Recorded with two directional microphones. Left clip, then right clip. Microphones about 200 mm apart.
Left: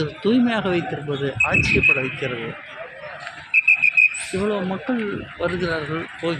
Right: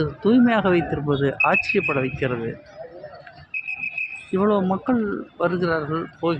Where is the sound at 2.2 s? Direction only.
20° right (ahead or behind).